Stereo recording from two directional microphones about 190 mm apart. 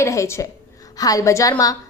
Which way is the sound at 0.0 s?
15° left (ahead or behind).